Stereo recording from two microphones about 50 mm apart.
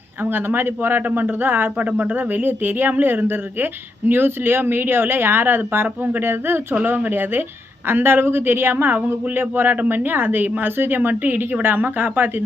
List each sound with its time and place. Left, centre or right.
0.2 s speech: right
1.8 s speech: right